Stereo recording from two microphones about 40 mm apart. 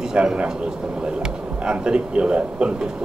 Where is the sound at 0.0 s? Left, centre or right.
Centre.